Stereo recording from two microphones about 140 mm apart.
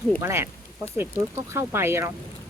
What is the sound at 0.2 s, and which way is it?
Speech, 20° right (ahead or behind).